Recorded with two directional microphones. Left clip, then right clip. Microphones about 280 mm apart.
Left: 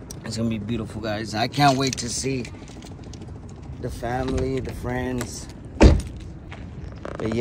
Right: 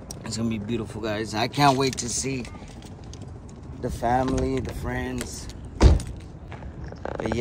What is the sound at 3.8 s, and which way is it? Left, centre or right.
Speech, centre.